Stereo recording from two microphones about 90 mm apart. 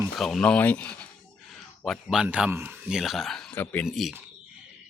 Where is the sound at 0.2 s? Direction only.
5° left (ahead or behind).